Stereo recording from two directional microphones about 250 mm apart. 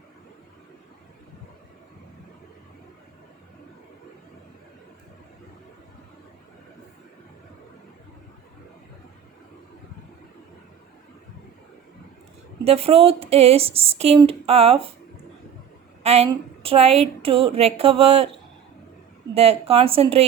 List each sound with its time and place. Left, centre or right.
12.6 s speech: right
16.0 s speech: right
19.3 s speech: right